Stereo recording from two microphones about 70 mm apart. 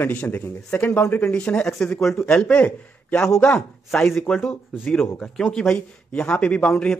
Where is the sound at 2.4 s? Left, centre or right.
Centre.